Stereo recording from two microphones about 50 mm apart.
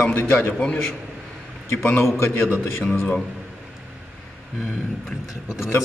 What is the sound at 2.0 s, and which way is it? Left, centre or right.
Speech, left.